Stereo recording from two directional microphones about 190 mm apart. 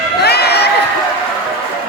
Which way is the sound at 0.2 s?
60° left (ahead or behind).